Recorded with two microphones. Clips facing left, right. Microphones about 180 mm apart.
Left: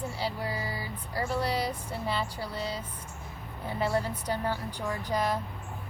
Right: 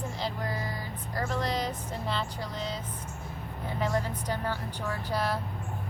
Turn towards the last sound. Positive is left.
turn(degrees=15)  # may be behind; listen again after turning